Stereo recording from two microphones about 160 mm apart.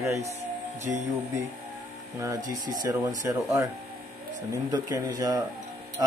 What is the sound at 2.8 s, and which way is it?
Speech, 20° right (ahead or behind).